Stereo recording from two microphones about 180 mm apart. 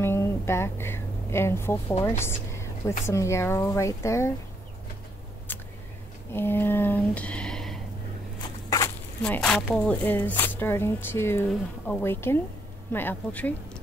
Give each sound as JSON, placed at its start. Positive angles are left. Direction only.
{"t": 0.0, "sound": "speech", "side_deg": 15}
{"t": 5.5, "sound": "a sound", "side_deg": 10}
{"t": 6.3, "sound": "speech", "side_deg": 10}
{"t": 8.6, "sound": "walk", "side_deg": 20}
{"t": 9.2, "sound": "speech", "side_deg": 5}